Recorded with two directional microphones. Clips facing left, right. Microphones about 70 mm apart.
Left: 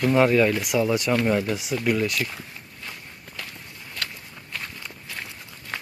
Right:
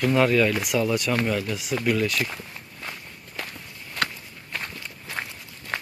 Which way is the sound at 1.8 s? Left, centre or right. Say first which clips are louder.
Even; centre.